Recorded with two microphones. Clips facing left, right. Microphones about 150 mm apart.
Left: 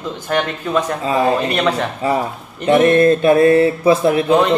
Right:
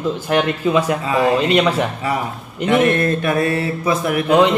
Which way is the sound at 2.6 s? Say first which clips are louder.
Left 4 dB; 35° left (ahead or behind).